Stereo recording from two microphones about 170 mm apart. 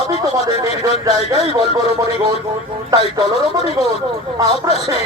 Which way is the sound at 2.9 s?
20° right (ahead or behind).